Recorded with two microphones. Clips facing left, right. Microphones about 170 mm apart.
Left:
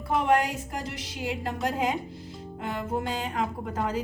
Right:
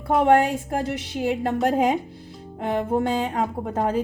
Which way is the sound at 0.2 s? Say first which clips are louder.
Right 7 dB; 55° right (ahead or behind).